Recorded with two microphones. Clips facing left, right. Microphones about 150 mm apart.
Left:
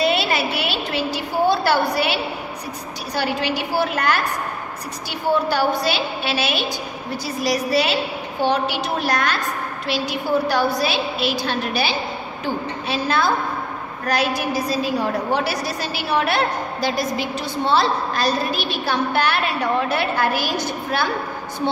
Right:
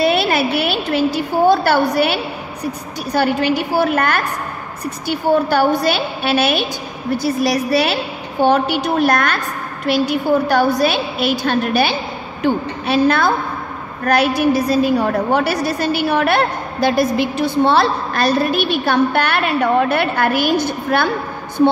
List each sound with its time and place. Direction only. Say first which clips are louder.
0.0 s a woman's voice: right 4 dB; 50° right (ahead or behind)